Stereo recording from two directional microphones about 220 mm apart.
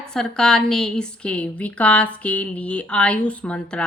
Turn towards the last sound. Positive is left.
turn(degrees=5)  # may be behind; listen again after turning